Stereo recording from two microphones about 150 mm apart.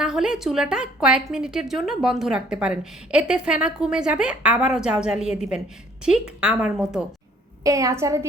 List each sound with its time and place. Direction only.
0.0 s a woman's voice: 5° right (ahead or behind)
7.6 s a woman's voice: 20° right (ahead or behind)